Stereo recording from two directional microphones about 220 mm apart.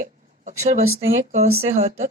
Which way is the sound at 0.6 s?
30° right (ahead or behind).